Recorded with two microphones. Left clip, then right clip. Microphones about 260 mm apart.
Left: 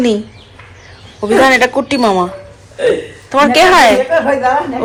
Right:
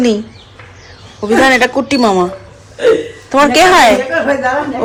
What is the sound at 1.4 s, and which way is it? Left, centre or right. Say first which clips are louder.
Speech: even; centre.